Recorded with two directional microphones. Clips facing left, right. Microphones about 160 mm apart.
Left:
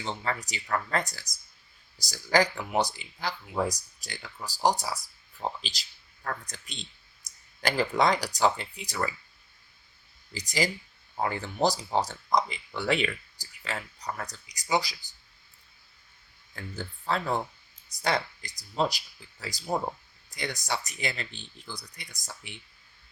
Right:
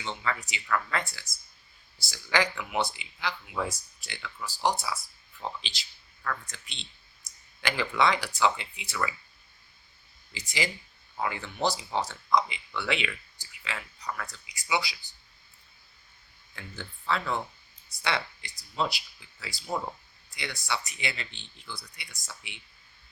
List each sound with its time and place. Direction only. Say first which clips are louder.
0.0 s speech: left 1 dB; 35° left (ahead or behind)
10.3 s speech: left 4 dB; 40° left (ahead or behind)
16.6 s speech: left 4 dB; 40° left (ahead or behind)